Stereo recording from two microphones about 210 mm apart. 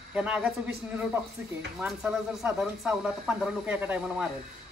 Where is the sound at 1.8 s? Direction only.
5° right (ahead or behind).